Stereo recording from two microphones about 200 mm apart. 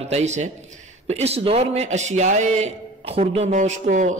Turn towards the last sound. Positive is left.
turn(degrees=-35)  # may be behind; listen again after turning